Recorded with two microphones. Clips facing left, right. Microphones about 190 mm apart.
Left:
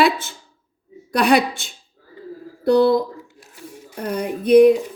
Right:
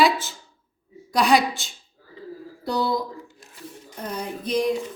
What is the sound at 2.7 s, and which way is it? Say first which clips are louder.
A woman's voice: left 10 dB; 60° left (ahead or behind).